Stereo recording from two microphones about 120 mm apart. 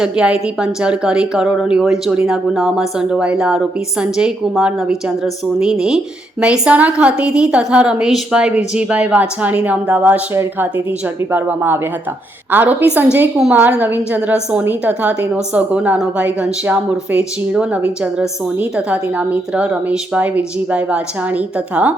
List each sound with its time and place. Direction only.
0.0 s a woman's voice: 10° right (ahead or behind)